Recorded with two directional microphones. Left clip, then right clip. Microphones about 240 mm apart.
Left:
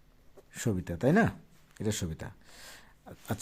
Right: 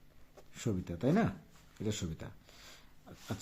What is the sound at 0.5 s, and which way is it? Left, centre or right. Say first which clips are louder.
Speech: left 5 dB; left.